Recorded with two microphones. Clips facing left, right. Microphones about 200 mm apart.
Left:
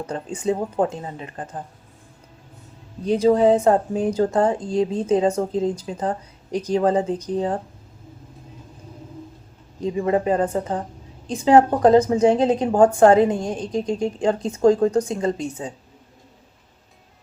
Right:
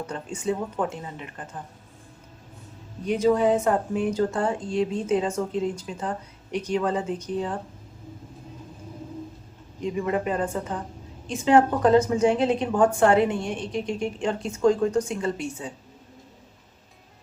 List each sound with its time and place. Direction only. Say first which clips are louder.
0.1 s speech: left 6 dB; 35° left (ahead or behind)
3.1 s speech: left 5 dB; 30° left (ahead or behind)
9.8 s speech: left 5 dB; 35° left (ahead or behind)